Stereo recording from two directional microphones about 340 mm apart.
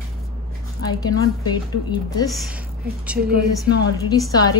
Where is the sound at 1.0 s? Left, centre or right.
Centre.